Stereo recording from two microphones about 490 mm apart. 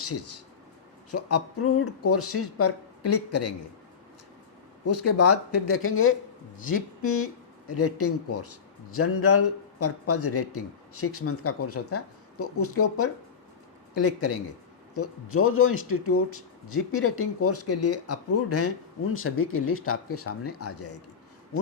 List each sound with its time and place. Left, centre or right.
1.1 s speech: left
4.9 s speech: left